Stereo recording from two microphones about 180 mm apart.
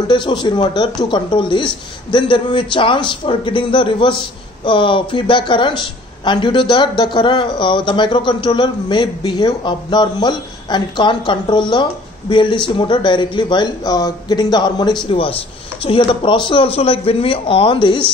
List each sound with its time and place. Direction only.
0.1 s a woman's voice: 25° left (ahead or behind)